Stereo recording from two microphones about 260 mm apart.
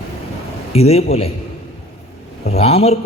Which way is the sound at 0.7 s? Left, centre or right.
Left.